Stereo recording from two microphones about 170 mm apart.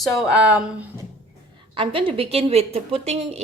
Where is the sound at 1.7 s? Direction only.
30° right (ahead or behind).